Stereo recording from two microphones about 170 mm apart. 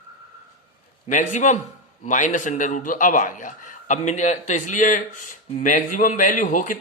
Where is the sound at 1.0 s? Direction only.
50° left (ahead or behind).